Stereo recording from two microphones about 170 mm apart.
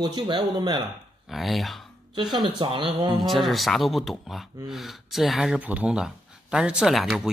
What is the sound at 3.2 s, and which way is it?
Speech, centre (ahead or behind).